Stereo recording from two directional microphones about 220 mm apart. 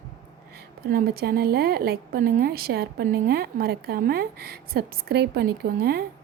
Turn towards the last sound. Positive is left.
turn(degrees=-45)  # may be behind; listen again after turning